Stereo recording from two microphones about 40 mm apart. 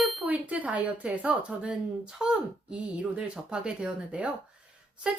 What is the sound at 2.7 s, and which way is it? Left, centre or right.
A woman's voice, right.